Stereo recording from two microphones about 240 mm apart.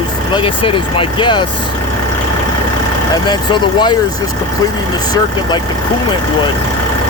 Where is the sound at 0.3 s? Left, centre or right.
Left.